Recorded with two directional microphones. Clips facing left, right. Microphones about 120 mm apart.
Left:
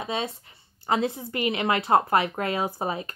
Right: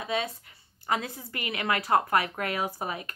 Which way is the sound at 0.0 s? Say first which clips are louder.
Left 1 dB; 25° left (ahead or behind).